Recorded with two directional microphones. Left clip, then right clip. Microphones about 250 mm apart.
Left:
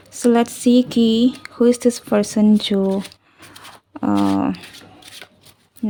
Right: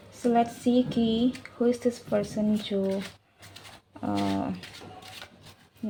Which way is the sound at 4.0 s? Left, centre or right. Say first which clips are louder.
Left 11 dB; left.